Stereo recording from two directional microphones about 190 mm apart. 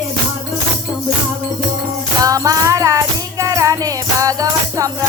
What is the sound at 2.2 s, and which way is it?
Music, 20° right (ahead or behind).